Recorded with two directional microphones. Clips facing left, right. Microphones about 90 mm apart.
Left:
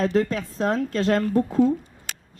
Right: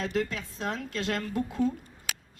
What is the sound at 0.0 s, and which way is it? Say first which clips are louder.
Speech: left 8 dB; 40° left (ahead or behind).